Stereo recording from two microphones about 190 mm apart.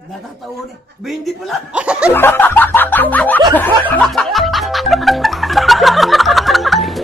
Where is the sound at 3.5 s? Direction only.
10° left (ahead or behind).